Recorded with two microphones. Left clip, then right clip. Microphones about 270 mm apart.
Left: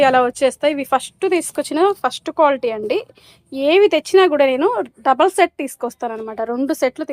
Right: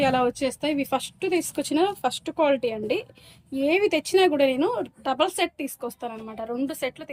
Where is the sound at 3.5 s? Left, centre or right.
Centre.